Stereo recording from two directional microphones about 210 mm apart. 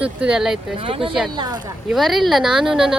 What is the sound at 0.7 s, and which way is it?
Speech, 25° right (ahead or behind).